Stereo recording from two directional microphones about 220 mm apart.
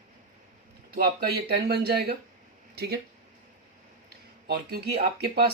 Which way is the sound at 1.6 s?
45° right (ahead or behind).